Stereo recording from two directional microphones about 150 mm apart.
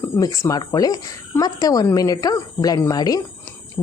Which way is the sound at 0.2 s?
20° left (ahead or behind).